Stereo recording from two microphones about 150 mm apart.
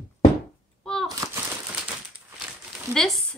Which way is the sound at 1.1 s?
20° right (ahead or behind).